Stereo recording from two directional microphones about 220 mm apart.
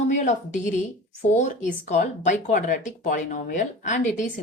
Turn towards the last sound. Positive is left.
turn(degrees=35)  # may be behind; listen again after turning